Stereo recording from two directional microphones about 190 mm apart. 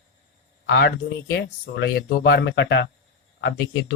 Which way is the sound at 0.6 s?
65° left (ahead or behind).